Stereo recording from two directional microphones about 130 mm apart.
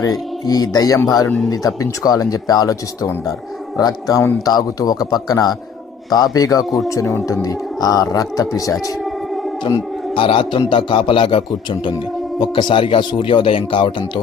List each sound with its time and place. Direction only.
0.0 s speech: 30° left (ahead or behind)
9.0 s music: centre (ahead or behind)
10.2 s speech: 40° left (ahead or behind)